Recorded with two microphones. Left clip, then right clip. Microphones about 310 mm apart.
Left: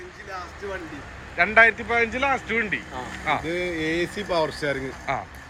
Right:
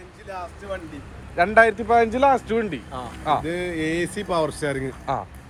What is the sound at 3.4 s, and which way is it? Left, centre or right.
Speech, right.